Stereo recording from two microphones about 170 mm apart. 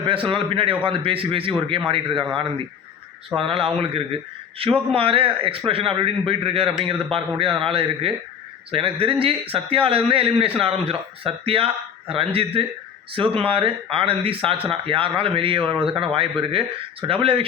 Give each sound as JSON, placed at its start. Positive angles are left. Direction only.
{"t": 0.0, "sound": "a man's voice", "side_deg": -30}
{"t": 3.3, "sound": "a man's voice", "side_deg": -30}